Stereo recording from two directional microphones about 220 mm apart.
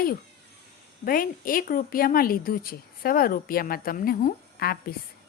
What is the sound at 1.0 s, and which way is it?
A woman's voice, 40° left (ahead or behind).